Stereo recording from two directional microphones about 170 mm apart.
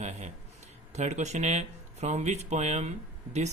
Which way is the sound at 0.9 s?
40° right (ahead or behind).